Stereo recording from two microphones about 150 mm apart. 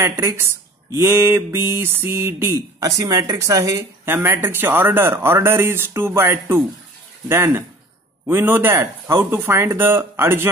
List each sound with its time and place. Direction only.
0.2 s speech: 20° right (ahead or behind)